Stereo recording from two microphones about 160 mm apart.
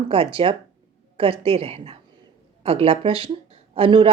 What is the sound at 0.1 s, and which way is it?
A woman's voice, 35° right (ahead or behind).